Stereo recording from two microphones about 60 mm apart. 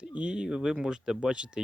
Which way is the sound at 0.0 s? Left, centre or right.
Centre.